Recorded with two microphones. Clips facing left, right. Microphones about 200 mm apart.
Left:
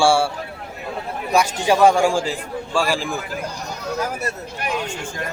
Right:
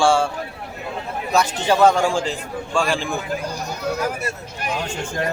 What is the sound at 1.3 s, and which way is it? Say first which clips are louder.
A man's voice: left 1 dB; 10° left (ahead or behind).